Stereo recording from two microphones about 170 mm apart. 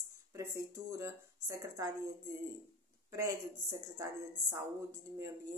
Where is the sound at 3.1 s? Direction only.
15° right (ahead or behind).